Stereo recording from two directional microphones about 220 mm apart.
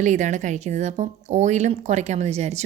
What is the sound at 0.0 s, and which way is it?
A woman's voice, 35° right (ahead or behind).